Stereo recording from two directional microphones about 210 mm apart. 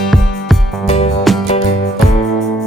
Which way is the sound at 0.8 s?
30° left (ahead or behind).